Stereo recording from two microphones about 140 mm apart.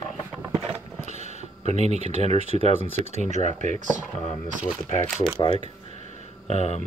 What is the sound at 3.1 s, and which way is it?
Speech, 60° right (ahead or behind).